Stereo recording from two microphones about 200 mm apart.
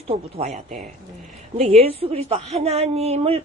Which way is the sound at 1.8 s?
30° right (ahead or behind).